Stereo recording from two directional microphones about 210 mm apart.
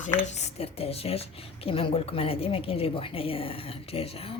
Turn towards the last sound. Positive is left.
turn(degrees=25)  # may be behind; listen again after turning